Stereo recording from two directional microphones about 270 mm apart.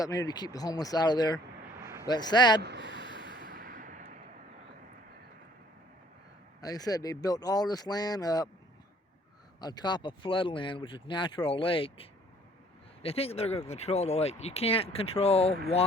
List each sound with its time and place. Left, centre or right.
0.0 s speech: centre
1.8 s a sound: centre
2.0 s speech: centre
2.6 s snort: right
6.6 s speech: centre
9.6 s speech: centre